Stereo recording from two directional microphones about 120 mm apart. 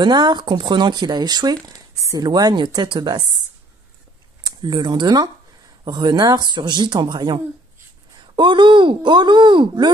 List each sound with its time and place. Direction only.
0.0 s speech: 35° right (ahead or behind)
4.6 s speech: 40° right (ahead or behind)